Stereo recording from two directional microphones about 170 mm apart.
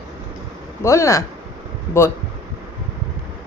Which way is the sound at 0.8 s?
15° left (ahead or behind).